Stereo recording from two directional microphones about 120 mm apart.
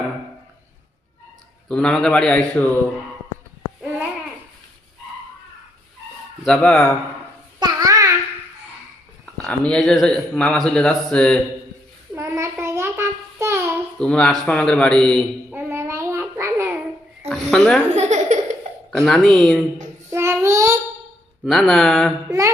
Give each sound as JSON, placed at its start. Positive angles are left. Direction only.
{"t": 1.6, "sound": "speech", "side_deg": 5}
{"t": 6.4, "sound": "speech", "side_deg": 10}
{"t": 7.6, "sound": "babbling", "side_deg": -35}
{"t": 9.2, "sound": "speech", "side_deg": 10}
{"t": 12.1, "sound": "child singing", "side_deg": -25}
{"t": 14.0, "sound": "a man's voice", "side_deg": 5}
{"t": 15.5, "sound": "child singing", "side_deg": -20}
{"t": 17.2, "sound": "speech", "side_deg": 5}
{"t": 17.9, "sound": "laughter", "side_deg": -75}
{"t": 18.9, "sound": "a man's voice", "side_deg": 5}
{"t": 20.1, "sound": "child singing", "side_deg": -20}
{"t": 21.4, "sound": "a man's voice", "side_deg": 0}
{"t": 22.3, "sound": "speech", "side_deg": -25}